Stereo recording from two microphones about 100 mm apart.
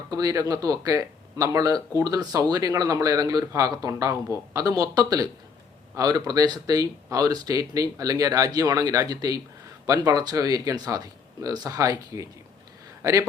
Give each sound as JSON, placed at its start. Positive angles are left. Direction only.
{"t": 0.1, "sound": "speech", "side_deg": -40}